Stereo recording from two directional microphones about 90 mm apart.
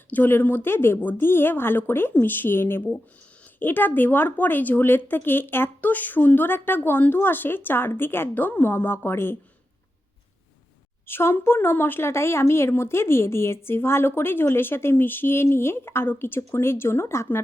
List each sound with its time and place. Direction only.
0.1 s speech: 20° left (ahead or behind)
11.0 s speech: 25° left (ahead or behind)